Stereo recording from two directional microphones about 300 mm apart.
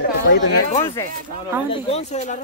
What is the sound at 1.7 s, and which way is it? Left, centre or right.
Speech, centre.